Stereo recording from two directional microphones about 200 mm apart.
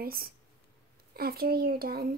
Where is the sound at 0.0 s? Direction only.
50° right (ahead or behind).